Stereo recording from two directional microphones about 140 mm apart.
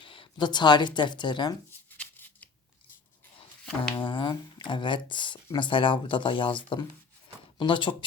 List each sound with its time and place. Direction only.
0.0 s speech: 35° left (ahead or behind)
1.9 s a sound: 15° left (ahead or behind)
3.9 s speech: 35° left (ahead or behind)